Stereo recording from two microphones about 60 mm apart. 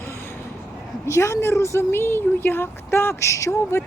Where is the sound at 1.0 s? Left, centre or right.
Left.